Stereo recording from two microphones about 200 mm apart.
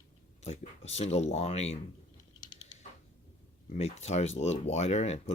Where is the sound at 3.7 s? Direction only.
30° left (ahead or behind).